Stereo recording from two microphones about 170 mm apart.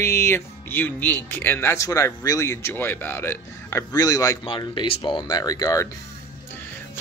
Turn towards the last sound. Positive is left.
turn(degrees=20)  # may be behind; listen again after turning